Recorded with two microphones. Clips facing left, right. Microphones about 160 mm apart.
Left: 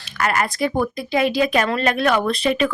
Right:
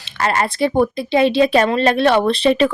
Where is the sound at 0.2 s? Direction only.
30° right (ahead or behind).